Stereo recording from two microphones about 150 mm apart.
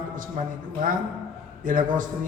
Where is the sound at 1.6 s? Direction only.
60° right (ahead or behind).